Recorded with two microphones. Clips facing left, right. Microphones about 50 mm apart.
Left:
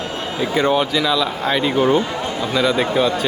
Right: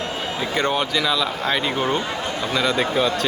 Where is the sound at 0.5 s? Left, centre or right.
Centre.